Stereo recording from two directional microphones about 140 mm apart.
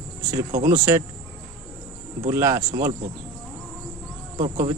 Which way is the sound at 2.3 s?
20° right (ahead or behind).